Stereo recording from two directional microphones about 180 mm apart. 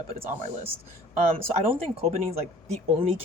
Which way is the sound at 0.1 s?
35° right (ahead or behind).